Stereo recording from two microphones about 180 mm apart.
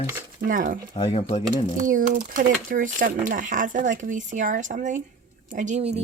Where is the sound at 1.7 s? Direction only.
45° right (ahead or behind).